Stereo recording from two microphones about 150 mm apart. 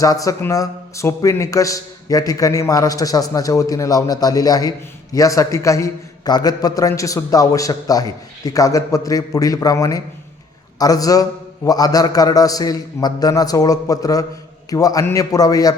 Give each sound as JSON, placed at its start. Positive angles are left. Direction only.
{"t": 0.0, "sound": "a man's voice", "side_deg": 20}